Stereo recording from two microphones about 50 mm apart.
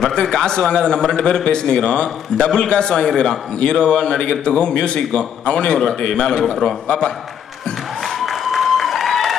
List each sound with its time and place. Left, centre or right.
0.0 s a man's voice: centre
8.2 s applause: centre